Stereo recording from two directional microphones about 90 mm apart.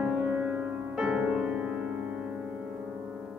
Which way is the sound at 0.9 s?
15° right (ahead or behind).